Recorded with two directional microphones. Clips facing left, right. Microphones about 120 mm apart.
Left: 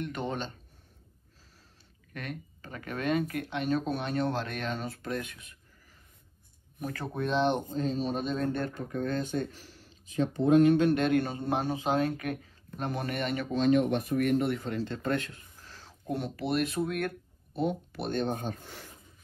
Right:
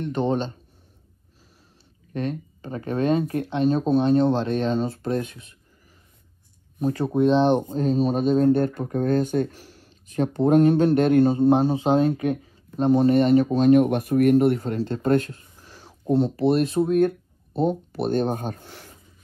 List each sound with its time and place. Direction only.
0.0 s speech: 30° right (ahead or behind)
2.1 s speech: 30° right (ahead or behind)
6.8 s speech: 20° right (ahead or behind); by 15.4 s 40° right (ahead or behind)
15.6 s a sound: 15° right (ahead or behind)
16.1 s speech: 30° right (ahead or behind); by 18.6 s 50° right (ahead or behind)